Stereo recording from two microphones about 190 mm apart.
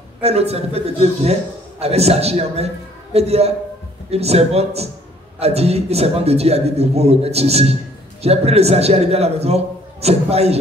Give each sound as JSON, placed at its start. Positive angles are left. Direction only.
{"t": 0.2, "sound": "a man's voice", "side_deg": -35}